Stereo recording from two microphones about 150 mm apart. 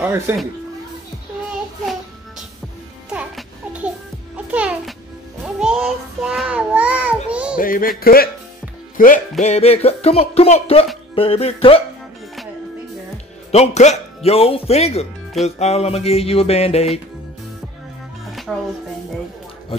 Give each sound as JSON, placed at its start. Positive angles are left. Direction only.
{"t": 0.0, "sound": "speech", "side_deg": -15}
{"t": 3.1, "sound": "music", "side_deg": -5}
{"t": 5.4, "sound": "child singing", "side_deg": -5}
{"t": 7.5, "sound": "speech", "side_deg": 70}
{"t": 8.9, "sound": "music", "side_deg": 65}
{"t": 9.4, "sound": "speech", "side_deg": 45}
{"t": 13.5, "sound": "speech", "side_deg": 50}
{"t": 18.2, "sound": "music", "side_deg": 0}